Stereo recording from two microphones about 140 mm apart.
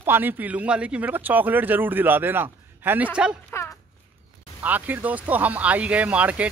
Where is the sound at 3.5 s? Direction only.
20° left (ahead or behind).